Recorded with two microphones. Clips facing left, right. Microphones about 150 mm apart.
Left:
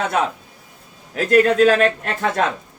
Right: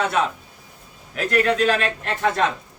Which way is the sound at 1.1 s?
45° left (ahead or behind).